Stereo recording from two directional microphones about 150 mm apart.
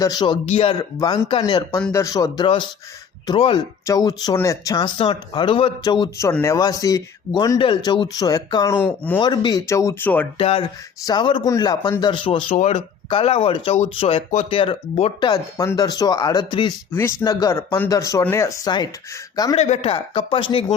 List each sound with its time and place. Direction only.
0.0 s speech: 25° left (ahead or behind)
0.8 s speech: 25° left (ahead or behind)
3.8 s speech: 25° left (ahead or behind)
4.9 s speech: 35° left (ahead or behind)
7.6 s speech: 35° left (ahead or behind); by 9.1 s 15° left (ahead or behind)
9.1 s speech: 30° left (ahead or behind); by 10.2 s 10° left (ahead or behind)
10.3 s speech: 40° left (ahead or behind)
15.2 s speech: 25° left (ahead or behind)
19.5 s speech: 45° left (ahead or behind)